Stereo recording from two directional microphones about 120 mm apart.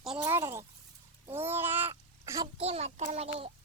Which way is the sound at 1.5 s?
20° right (ahead or behind).